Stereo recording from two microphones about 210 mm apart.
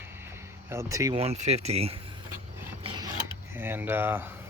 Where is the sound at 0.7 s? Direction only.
15° right (ahead or behind).